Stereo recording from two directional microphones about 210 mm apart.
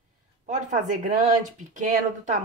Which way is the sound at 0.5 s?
35° right (ahead or behind).